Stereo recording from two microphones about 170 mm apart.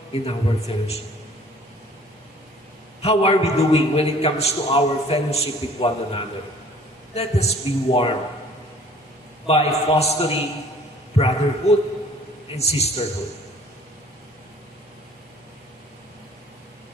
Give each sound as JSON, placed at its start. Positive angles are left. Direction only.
{"t": 0.1, "sound": "a man's voice", "side_deg": 35}
{"t": 3.0, "sound": "a man's voice", "side_deg": 35}
{"t": 9.5, "sound": "a man's voice", "side_deg": 35}